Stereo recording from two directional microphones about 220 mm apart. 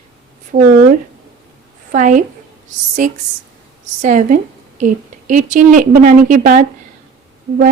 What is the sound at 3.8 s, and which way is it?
A woman's voice, 35° right (ahead or behind).